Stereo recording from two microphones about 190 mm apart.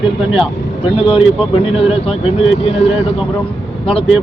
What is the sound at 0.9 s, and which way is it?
Speech, 30° left (ahead or behind).